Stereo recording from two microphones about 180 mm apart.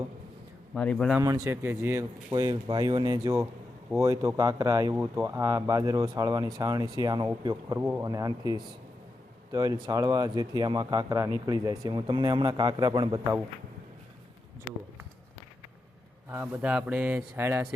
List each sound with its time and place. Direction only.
0.7 s a man's voice: 5° left (ahead or behind)
1.2 s speech: 15° right (ahead or behind)
16.3 s speech: 10° right (ahead or behind)